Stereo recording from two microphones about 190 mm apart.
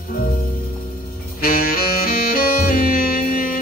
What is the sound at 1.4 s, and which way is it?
Saxophone, 50° left (ahead or behind).